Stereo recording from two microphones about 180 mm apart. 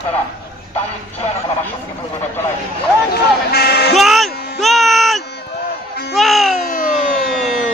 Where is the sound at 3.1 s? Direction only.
60° left (ahead or behind).